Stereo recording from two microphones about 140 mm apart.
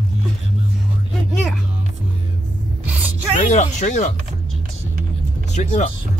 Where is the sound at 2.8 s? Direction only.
10° right (ahead or behind).